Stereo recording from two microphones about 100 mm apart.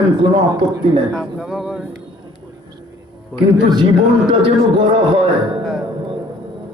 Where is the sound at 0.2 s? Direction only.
50° right (ahead or behind).